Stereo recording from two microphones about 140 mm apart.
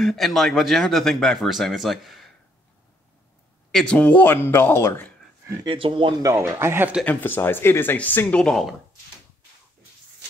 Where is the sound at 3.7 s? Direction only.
5° left (ahead or behind).